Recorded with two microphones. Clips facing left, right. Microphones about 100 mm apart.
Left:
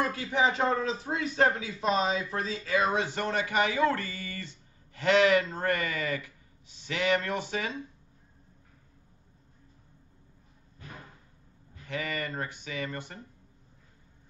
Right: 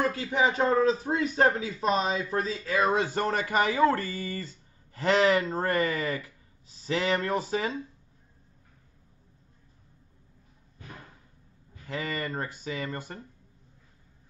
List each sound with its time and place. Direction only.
0.7 s speech: 35° right (ahead or behind)
11.9 s speech: 35° right (ahead or behind)